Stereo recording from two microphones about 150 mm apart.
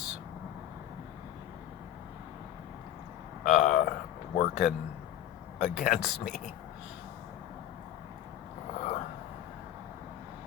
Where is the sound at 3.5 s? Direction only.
65° left (ahead or behind).